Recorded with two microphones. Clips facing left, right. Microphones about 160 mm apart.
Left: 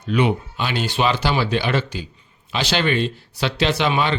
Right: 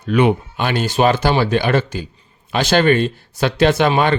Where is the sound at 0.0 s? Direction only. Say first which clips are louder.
Right 4 dB; 55° right (ahead or behind).